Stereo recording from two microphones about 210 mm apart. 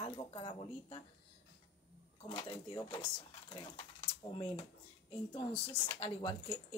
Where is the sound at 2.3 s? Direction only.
25° left (ahead or behind).